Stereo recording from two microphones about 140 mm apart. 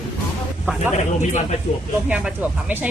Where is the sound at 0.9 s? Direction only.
60° left (ahead or behind).